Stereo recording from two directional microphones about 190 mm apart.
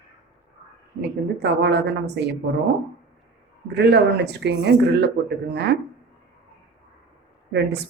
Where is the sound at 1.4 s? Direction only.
65° right (ahead or behind).